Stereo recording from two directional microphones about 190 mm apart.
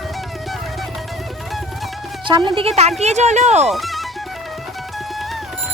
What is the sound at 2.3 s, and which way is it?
Speech, 25° right (ahead or behind).